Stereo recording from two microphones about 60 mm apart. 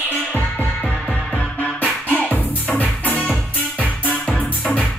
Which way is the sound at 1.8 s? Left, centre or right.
Left.